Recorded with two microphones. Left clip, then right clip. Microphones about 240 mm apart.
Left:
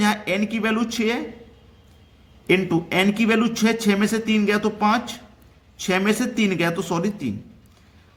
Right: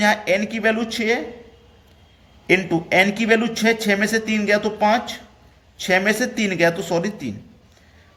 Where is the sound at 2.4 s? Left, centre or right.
Left.